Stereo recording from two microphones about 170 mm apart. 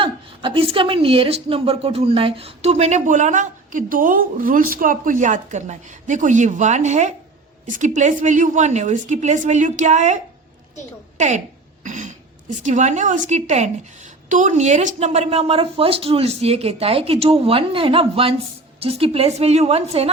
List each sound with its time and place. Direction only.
0.0 s speech: 30° right (ahead or behind)
11.2 s a woman's voice: 45° right (ahead or behind)